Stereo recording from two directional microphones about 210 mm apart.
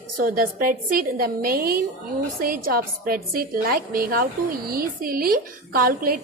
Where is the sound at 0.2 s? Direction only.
45° right (ahead or behind).